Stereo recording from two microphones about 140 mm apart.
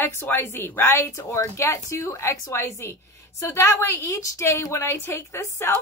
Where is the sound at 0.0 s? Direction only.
15° left (ahead or behind).